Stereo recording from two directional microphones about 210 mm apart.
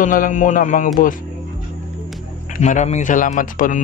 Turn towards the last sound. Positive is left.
turn(degrees=40)  # may be behind; listen again after turning